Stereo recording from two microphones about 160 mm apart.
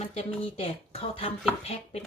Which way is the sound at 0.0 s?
40° left (ahead or behind).